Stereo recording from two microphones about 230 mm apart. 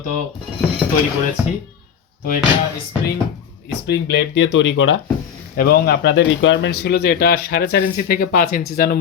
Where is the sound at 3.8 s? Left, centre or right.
Left.